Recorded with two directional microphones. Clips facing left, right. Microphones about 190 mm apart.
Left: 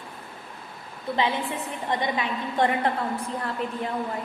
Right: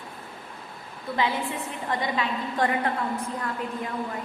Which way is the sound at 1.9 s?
20° left (ahead or behind).